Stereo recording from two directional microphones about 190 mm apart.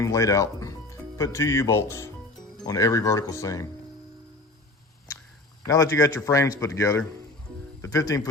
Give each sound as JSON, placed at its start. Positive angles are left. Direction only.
{"t": 0.0, "sound": "a man's voice", "side_deg": 15}
{"t": 5.6, "sound": "a man's voice", "side_deg": 20}